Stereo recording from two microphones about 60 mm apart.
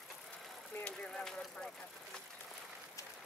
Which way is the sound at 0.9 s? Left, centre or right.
Centre.